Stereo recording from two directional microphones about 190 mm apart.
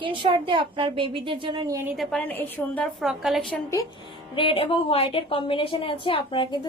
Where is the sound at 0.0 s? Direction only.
25° right (ahead or behind).